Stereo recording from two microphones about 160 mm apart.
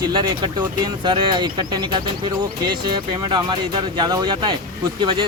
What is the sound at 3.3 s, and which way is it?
Speech, 30° right (ahead or behind).